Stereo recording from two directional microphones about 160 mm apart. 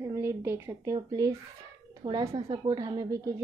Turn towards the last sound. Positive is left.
turn(degrees=-20)  # may be behind; listen again after turning